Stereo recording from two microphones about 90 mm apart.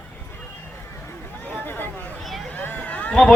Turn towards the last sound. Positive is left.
turn(degrees=10)  # may be behind; listen again after turning